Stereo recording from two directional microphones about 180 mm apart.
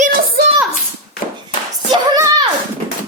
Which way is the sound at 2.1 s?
20° right (ahead or behind).